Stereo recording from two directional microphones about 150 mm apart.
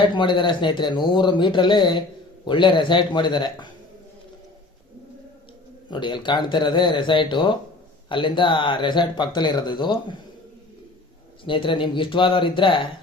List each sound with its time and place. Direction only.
0.0 s speech: 30° left (ahead or behind)
5.9 s speech: 30° left (ahead or behind)
11.4 s speech: 35° left (ahead or behind)